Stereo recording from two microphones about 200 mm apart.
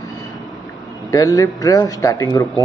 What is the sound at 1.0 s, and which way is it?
Speech, 15° left (ahead or behind).